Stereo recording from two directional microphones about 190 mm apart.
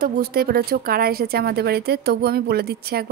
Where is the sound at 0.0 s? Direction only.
55° right (ahead or behind).